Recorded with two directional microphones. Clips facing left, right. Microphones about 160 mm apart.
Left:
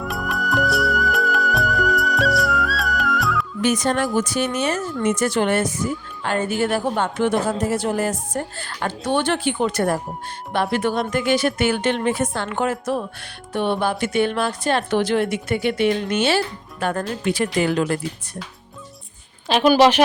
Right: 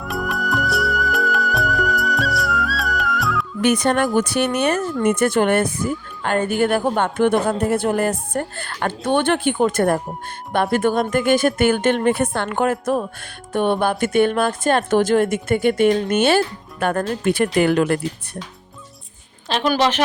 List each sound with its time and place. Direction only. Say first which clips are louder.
0.0 s music: right 1 dB; centre (ahead or behind)
3.6 s a woman's voice: right 3 dB; 60° right (ahead or behind)
19.5 s a woman's voice: left 4 dB; 10° left (ahead or behind)